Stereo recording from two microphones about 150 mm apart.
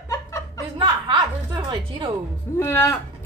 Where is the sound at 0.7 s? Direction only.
30° right (ahead or behind).